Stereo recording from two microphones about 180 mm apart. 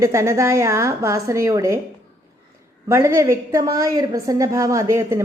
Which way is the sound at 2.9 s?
15° right (ahead or behind).